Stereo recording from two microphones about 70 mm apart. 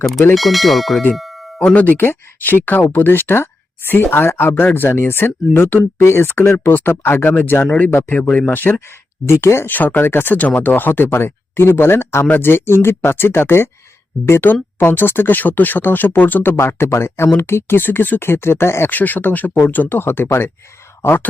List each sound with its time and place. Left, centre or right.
0.3 s speech: centre
1.1 s a sound: centre
1.7 s speech: left
9.2 s speech: left
9.6 s speech: left
18.9 s speech: left